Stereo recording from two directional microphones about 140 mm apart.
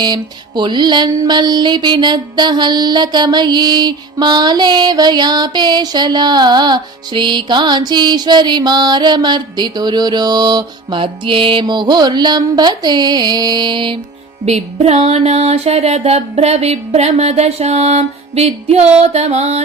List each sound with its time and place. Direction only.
0.0 s mantra: 30° right (ahead or behind)
14.4 s music: 50° right (ahead or behind)